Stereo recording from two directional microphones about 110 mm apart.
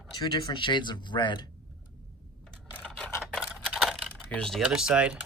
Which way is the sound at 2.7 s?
10° left (ahead or behind).